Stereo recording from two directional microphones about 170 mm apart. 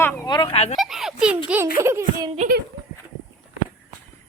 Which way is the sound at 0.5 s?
40° left (ahead or behind).